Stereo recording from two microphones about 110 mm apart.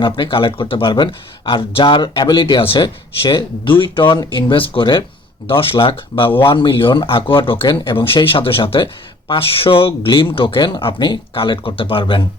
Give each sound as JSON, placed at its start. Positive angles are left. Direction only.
{"t": 0.0, "sound": "speech", "side_deg": 50}